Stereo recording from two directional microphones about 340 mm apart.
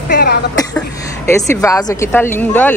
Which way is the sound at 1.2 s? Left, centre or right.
Centre.